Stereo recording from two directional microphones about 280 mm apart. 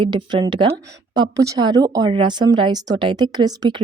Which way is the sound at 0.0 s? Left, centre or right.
Centre.